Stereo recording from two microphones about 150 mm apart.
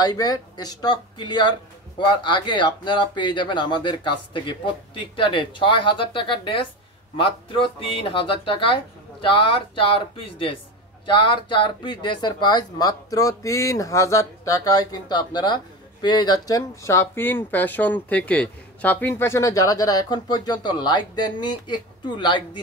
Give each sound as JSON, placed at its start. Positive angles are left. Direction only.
{"t": 0.0, "sound": "speech", "side_deg": 25}